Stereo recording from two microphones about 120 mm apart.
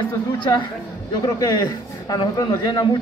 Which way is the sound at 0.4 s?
40° left (ahead or behind).